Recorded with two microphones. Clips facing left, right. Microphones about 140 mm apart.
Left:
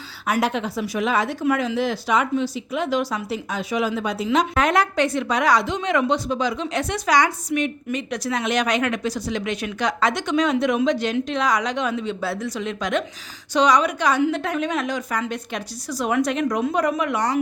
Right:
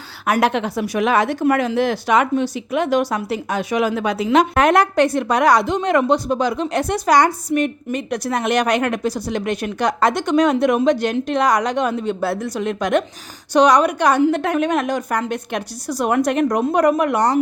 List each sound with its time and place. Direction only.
0.3 s a woman's voice: 70° right (ahead or behind)
7.2 s a woman's voice: 40° right (ahead or behind); by 17.2 s 60° right (ahead or behind)